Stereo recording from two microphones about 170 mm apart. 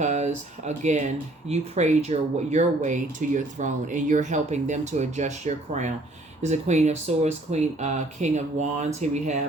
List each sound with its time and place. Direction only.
0.0 s speech: 40° right (ahead or behind)